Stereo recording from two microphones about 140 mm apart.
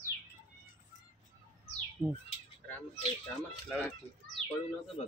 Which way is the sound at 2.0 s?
30° right (ahead or behind).